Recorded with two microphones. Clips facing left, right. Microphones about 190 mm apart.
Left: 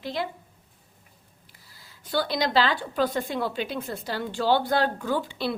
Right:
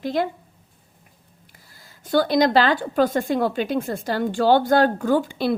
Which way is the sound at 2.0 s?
45° right (ahead or behind).